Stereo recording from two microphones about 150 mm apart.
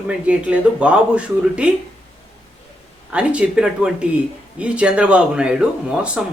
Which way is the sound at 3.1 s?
5° right (ahead or behind).